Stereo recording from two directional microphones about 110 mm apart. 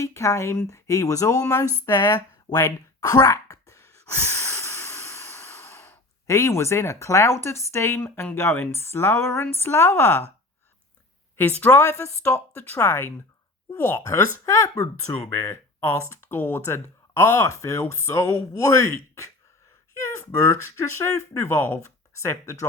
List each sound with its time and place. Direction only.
0.0 s speech: 30° left (ahead or behind)
11.3 s a woman's voice: 15° left (ahead or behind)
11.8 s speech: 25° left (ahead or behind)